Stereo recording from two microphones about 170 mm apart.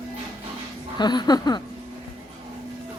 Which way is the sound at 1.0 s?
25° left (ahead or behind).